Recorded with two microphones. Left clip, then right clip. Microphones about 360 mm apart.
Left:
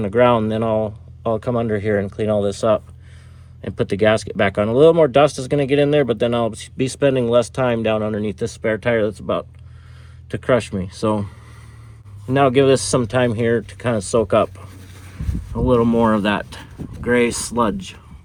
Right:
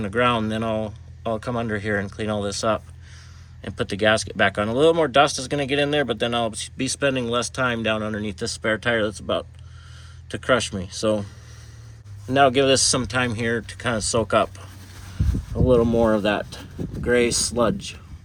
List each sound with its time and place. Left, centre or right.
0.0 s speech: centre
10.2 s speech: centre
12.3 s speech: centre
15.7 s speech: left
16.2 s speech: centre